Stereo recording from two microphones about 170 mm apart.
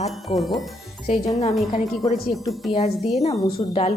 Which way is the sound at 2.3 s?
Centre (ahead or behind).